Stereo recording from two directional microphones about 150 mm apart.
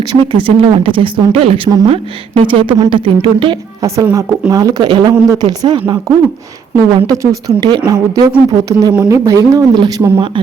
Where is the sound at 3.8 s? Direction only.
20° right (ahead or behind).